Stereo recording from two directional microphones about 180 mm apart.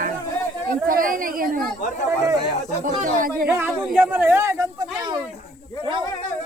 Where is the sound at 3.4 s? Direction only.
10° right (ahead or behind).